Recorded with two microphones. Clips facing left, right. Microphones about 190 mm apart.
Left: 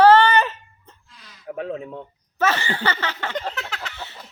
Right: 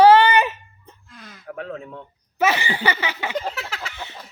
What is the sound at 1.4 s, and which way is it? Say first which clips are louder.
Speech: left 3 dB; 20° left (ahead or behind).